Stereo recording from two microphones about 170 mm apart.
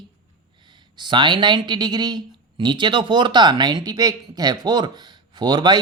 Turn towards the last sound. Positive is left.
turn(degrees=-25)  # may be behind; listen again after turning